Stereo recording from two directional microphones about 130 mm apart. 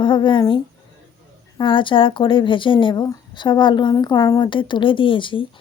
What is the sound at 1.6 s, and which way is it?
A woman's voice, 40° left (ahead or behind).